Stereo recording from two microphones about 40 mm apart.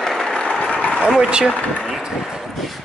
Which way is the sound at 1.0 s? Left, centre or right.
Right.